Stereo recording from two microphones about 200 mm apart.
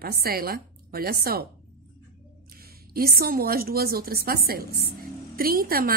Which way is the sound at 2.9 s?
50° right (ahead or behind).